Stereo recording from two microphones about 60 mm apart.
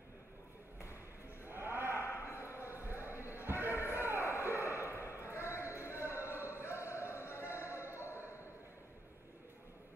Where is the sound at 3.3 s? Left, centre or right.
Right.